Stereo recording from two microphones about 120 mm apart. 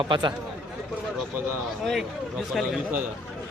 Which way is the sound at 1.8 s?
Centre (ahead or behind).